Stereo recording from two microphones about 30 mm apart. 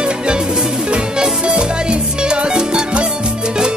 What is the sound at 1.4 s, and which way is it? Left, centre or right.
Music, right.